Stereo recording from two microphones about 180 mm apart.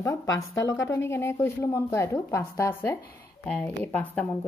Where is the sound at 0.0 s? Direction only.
15° left (ahead or behind).